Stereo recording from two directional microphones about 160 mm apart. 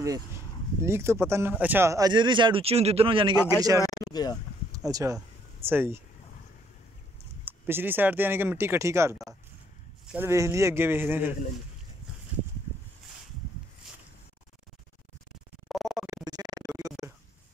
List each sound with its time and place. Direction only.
0.0 s speech: 20° right (ahead or behind)
3.8 s speech: 25° left (ahead or behind)
4.7 s speech: 20° right (ahead or behind)
7.4 s speech: 15° right (ahead or behind)
15.7 s scratching: centre (ahead or behind)
16.3 s a sound: 25° right (ahead or behind)